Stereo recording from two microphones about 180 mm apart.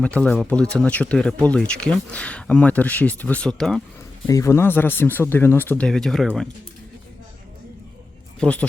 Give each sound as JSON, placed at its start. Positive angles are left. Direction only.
{"t": 0.0, "sound": "speech", "side_deg": 5}
{"t": 4.3, "sound": "speech", "side_deg": 15}
{"t": 8.4, "sound": "speech", "side_deg": 5}